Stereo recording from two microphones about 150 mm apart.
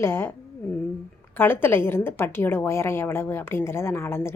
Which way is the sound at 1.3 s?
15° left (ahead or behind).